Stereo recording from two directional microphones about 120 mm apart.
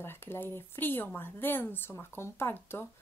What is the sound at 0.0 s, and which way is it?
Speech, 20° left (ahead or behind).